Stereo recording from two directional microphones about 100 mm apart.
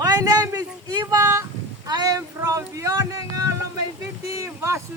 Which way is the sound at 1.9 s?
40° right (ahead or behind).